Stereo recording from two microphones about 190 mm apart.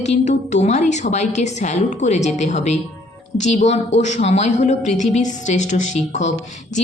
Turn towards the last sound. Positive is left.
turn(degrees=40)  # may be behind; listen again after turning